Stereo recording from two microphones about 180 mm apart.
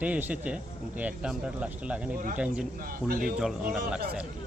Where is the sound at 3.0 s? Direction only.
55° right (ahead or behind).